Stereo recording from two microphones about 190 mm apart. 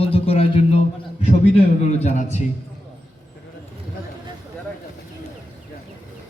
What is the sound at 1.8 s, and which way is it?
Speech, 35° left (ahead or behind).